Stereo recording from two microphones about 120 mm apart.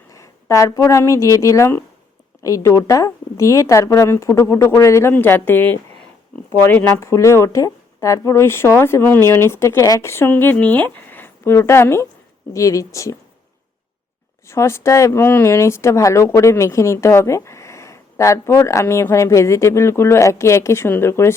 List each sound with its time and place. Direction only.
0.1 s speech: 25° left (ahead or behind)
14.4 s speech: 25° left (ahead or behind)